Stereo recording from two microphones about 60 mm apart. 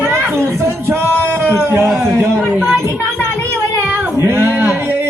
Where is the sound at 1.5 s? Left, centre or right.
Right.